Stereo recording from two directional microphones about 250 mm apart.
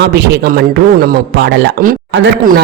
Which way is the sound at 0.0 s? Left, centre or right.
Right.